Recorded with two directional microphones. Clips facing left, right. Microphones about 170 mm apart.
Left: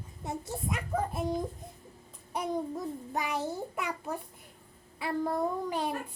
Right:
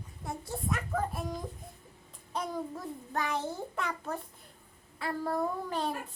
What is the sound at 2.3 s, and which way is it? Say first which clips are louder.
Child singing: left 3 dB; 15° left (ahead or behind).